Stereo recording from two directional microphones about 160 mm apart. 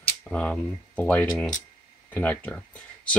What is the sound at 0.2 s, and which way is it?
Speech, 10° left (ahead or behind).